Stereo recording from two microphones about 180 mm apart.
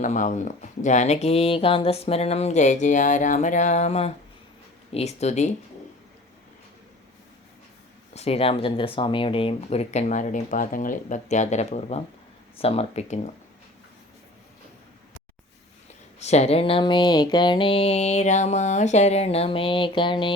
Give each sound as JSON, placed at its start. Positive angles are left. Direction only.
{"t": 0.0, "sound": "speech", "side_deg": 45}
{"t": 8.1, "sound": "speech", "side_deg": 35}
{"t": 16.2, "sound": "speech", "side_deg": 35}